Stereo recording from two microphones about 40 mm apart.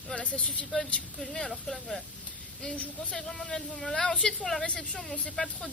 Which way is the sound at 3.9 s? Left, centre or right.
Left.